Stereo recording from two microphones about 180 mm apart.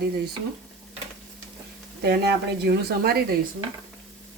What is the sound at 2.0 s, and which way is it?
Speech, 65° right (ahead or behind).